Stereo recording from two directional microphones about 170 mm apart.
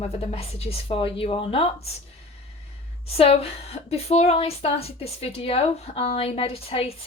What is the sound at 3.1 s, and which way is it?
A woman's voice, 35° left (ahead or behind).